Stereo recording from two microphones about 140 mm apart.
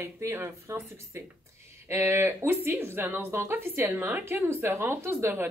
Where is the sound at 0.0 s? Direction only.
20° right (ahead or behind).